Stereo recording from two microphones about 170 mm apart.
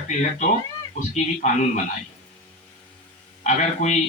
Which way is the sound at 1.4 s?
45° left (ahead or behind).